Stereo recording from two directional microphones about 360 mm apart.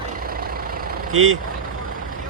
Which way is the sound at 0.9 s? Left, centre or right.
Right.